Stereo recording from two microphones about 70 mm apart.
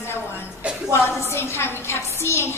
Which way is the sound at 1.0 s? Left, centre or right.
Left.